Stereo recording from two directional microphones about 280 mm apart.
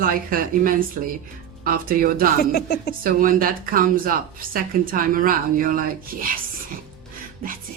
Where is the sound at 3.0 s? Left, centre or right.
Right.